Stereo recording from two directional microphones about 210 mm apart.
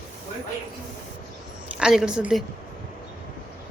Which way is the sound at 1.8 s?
5° right (ahead or behind).